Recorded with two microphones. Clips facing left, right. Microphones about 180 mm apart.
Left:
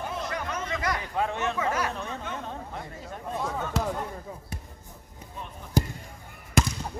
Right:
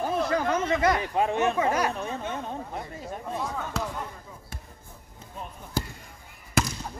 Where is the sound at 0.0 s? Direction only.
30° right (ahead or behind); by 1.5 s 15° right (ahead or behind).